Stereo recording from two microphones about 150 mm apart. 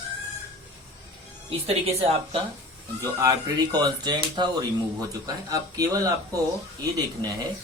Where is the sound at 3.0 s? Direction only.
20° right (ahead or behind).